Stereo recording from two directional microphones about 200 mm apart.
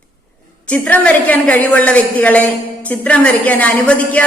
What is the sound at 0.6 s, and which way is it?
A woman's voice, 5° left (ahead or behind).